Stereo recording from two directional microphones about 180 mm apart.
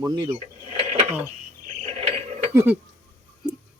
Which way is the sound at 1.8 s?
35° right (ahead or behind).